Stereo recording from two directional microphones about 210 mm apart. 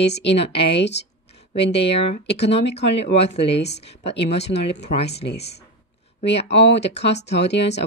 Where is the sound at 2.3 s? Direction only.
55° left (ahead or behind).